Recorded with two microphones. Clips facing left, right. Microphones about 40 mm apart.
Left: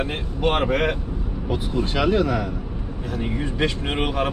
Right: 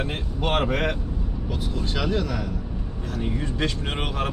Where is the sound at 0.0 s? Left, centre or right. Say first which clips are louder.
Left 4 dB; centre.